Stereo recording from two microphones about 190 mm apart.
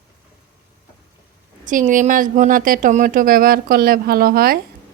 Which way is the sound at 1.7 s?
45° right (ahead or behind).